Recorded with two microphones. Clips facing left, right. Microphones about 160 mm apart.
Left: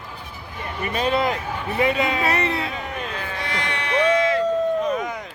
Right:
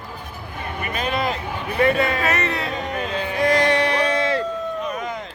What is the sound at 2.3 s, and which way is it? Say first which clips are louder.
Speech: even; 30° left (ahead or behind).